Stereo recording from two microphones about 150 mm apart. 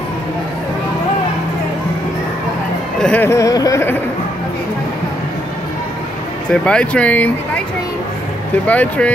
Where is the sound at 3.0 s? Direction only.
10° left (ahead or behind).